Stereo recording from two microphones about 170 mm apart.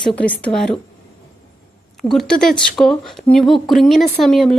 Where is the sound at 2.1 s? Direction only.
Centre (ahead or behind).